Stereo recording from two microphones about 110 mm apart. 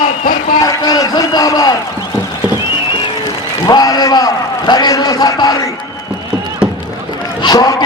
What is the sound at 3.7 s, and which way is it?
A man's voice, 40° left (ahead or behind).